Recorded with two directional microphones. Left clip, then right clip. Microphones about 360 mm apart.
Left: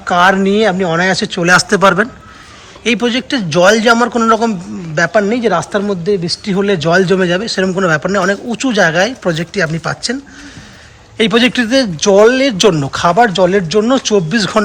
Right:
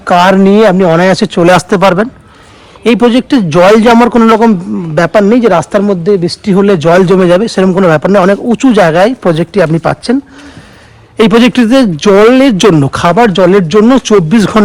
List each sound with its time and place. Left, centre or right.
0.0 s a man's voice: centre
11.2 s a man's voice: centre